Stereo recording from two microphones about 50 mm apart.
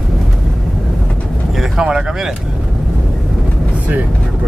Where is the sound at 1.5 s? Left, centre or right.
Centre.